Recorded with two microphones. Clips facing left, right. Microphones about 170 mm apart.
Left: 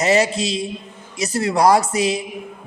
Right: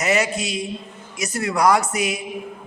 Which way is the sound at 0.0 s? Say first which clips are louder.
Left 4 dB; 30° left (ahead or behind).